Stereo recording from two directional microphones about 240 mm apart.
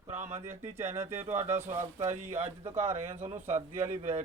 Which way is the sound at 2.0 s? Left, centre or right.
Right.